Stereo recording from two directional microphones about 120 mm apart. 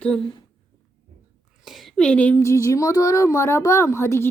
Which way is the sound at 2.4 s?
25° left (ahead or behind).